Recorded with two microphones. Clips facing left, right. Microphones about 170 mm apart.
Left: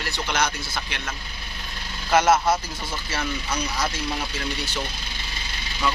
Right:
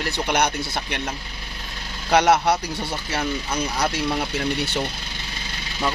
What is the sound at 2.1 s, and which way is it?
Speech, 65° right (ahead or behind).